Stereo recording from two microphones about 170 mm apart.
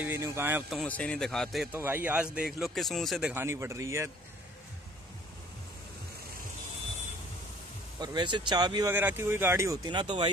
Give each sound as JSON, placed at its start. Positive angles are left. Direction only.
{"t": 0.0, "sound": "speech", "side_deg": -15}
{"t": 0.7, "sound": "speech", "side_deg": 5}
{"t": 1.7, "sound": "speech", "side_deg": -15}
{"t": 8.0, "sound": "speech", "side_deg": -25}
{"t": 8.9, "sound": "speech", "side_deg": -15}